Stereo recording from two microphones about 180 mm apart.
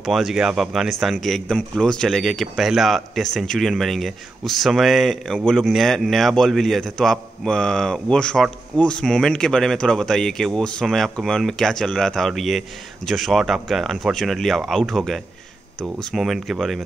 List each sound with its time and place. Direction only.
0.0 s speech: centre (ahead or behind)